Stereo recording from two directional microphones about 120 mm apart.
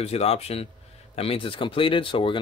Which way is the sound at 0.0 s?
60° left (ahead or behind).